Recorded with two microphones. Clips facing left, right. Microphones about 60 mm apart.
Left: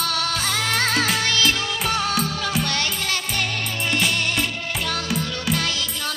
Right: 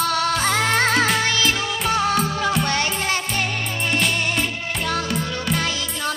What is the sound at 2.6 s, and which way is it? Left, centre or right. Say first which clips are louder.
Music: right 3 dB; right.